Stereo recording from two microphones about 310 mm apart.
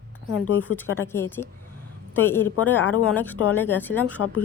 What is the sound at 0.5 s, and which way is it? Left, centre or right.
Speech, centre.